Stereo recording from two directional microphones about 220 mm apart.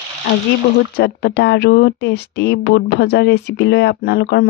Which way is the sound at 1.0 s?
50° left (ahead or behind).